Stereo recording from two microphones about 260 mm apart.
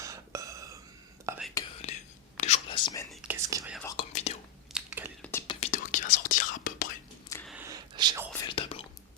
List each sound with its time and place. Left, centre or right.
0.0 s a sound: centre
1.2 s whispering: centre
1.8 s whispering: left
3.1 s whispering: centre
3.9 s whispering: left
4.7 s whispering: centre
5.5 s whispering: left
7.3 s a sound: centre
7.5 s whispering: centre
8.4 s whispering: centre